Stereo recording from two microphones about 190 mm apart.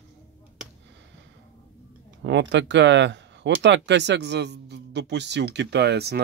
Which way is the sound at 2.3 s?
70° right (ahead or behind).